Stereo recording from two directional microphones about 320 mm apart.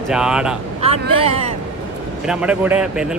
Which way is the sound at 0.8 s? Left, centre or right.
Centre.